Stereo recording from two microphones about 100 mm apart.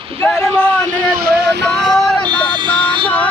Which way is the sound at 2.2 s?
50° right (ahead or behind).